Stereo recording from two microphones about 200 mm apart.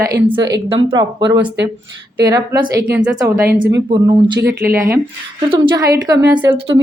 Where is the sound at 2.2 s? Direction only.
20° right (ahead or behind).